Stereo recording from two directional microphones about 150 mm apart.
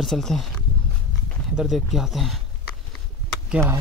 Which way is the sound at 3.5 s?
15° right (ahead or behind).